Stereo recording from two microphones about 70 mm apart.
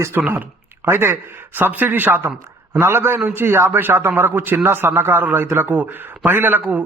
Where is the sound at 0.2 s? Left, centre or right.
Right.